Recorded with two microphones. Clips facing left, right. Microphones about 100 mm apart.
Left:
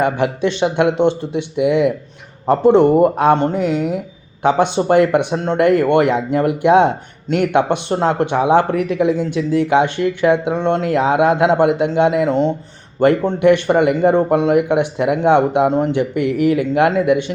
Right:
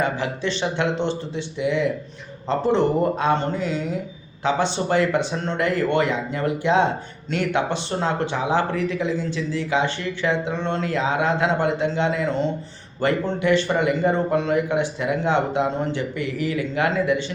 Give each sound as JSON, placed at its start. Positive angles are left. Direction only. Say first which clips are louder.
{"t": 0.0, "sound": "speech", "louder": "left 7 dB", "side_deg": 60}
{"t": 2.8, "sound": "speech", "louder": "left 9 dB", "side_deg": 20}
{"t": 3.2, "sound": "speech", "louder": "left 7 dB", "side_deg": 60}